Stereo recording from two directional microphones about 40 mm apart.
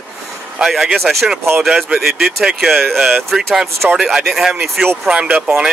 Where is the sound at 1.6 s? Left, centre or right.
Centre.